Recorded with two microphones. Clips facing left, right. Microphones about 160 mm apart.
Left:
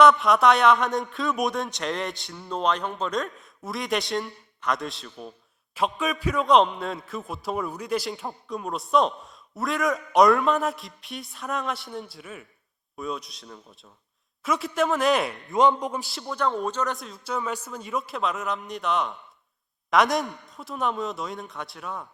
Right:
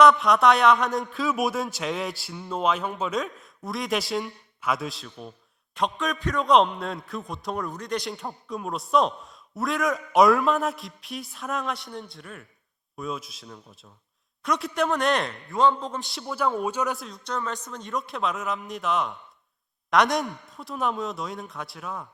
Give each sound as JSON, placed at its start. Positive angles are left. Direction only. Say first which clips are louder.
{"t": 0.0, "sound": "a man's voice", "louder": "even", "side_deg": 0}
{"t": 15.4, "sound": "a man's voice", "louder": "left 1 dB", "side_deg": 20}
{"t": 16.0, "sound": "a man's voice", "louder": "even", "side_deg": 0}